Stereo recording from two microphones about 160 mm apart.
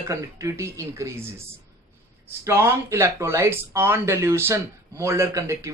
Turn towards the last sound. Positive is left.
turn(degrees=-20)  # may be behind; listen again after turning